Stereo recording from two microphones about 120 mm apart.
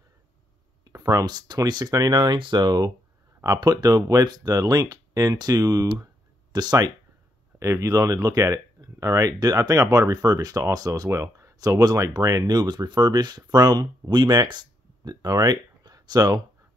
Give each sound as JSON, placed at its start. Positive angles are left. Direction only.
{"t": 0.8, "sound": "speech", "side_deg": -30}